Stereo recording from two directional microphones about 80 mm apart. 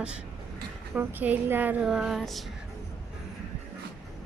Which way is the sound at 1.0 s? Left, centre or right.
Right.